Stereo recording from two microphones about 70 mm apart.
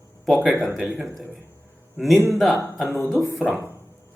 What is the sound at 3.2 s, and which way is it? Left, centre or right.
Speech, right.